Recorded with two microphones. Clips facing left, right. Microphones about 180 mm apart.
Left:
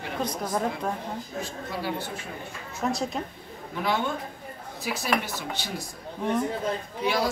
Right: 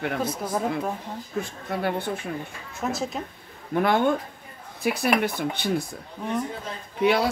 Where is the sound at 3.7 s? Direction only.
55° right (ahead or behind).